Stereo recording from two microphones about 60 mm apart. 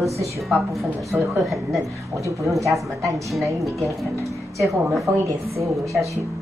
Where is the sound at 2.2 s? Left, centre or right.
Right.